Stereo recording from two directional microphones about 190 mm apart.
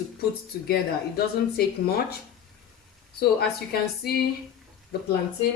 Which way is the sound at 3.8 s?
55° left (ahead or behind).